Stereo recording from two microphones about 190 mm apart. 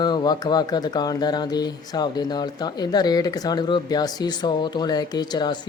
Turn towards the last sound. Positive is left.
turn(degrees=20)  # may be behind; listen again after turning